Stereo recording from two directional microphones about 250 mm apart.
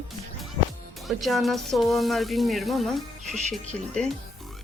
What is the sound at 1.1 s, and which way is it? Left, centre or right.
Speech, centre.